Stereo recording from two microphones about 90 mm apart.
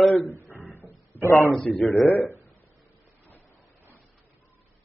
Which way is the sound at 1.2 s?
35° left (ahead or behind).